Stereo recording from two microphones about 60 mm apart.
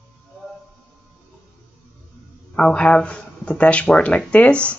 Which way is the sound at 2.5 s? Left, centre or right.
Centre.